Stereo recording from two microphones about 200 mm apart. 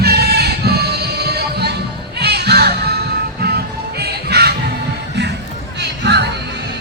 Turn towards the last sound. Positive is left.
turn(degrees=-55)  # may be behind; listen again after turning